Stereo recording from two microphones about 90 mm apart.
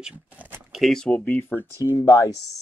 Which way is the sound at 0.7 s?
Centre (ahead or behind).